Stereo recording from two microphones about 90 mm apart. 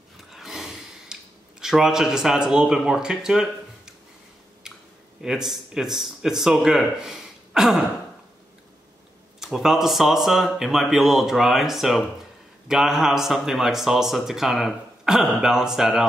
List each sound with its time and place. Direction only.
0.2 s gasp: 5° right (ahead or behind)
1.6 s a man's voice: 5° right (ahead or behind)
4.6 s a sound: 5° right (ahead or behind)
5.2 s a man's voice: 5° right (ahead or behind)
9.4 s a man's voice: 5° right (ahead or behind)